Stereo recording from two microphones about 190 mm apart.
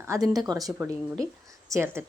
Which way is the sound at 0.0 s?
15° right (ahead or behind).